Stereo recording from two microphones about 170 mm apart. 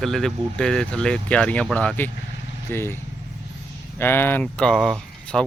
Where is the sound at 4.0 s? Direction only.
10° left (ahead or behind).